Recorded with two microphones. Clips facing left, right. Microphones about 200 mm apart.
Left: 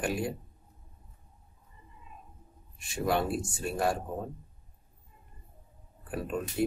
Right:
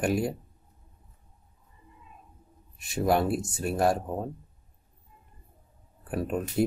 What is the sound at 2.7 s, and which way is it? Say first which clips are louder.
Speech: right 4 dB; 40° right (ahead or behind).